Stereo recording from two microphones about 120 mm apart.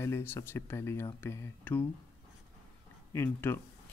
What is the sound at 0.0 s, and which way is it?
Speech, 20° left (ahead or behind).